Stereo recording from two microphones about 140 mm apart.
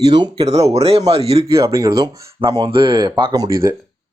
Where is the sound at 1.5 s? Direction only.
20° right (ahead or behind).